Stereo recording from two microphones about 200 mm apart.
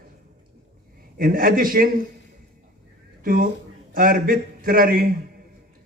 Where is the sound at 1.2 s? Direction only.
45° right (ahead or behind).